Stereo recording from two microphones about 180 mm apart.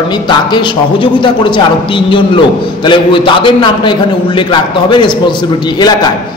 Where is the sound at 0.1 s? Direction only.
25° left (ahead or behind).